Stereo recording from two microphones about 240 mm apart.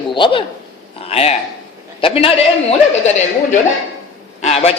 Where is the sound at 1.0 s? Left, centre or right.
Left.